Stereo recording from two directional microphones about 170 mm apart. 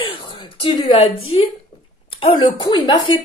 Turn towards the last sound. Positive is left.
turn(degrees=25)  # may be behind; listen again after turning